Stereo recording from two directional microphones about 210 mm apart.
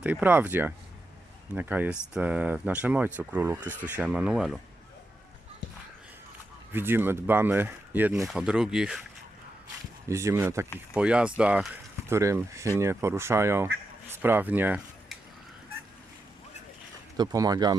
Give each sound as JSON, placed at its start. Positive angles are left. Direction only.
{"t": 0.0, "sound": "speech", "side_deg": -10}
{"t": 6.7, "sound": "speech", "side_deg": -10}
{"t": 10.1, "sound": "speech", "side_deg": -15}
{"t": 17.2, "sound": "speech", "side_deg": -15}